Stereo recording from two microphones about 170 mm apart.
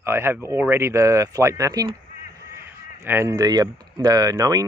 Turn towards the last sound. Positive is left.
turn(degrees=-20)  # may be behind; listen again after turning